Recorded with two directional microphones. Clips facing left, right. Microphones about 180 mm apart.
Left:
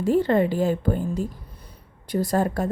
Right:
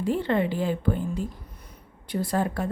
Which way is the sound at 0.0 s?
40° left (ahead or behind).